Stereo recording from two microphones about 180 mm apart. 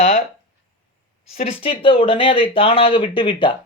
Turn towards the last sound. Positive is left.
turn(degrees=25)  # may be behind; listen again after turning